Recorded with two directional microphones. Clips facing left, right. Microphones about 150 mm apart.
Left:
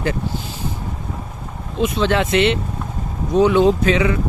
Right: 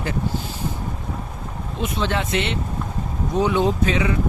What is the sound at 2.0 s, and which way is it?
Speech, 90° left.